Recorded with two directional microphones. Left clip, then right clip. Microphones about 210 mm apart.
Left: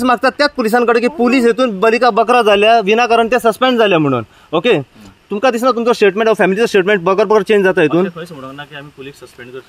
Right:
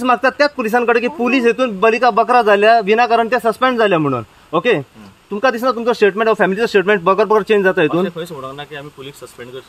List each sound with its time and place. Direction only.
0.0 s a man's voice: 45° left (ahead or behind)
8.2 s speech: centre (ahead or behind)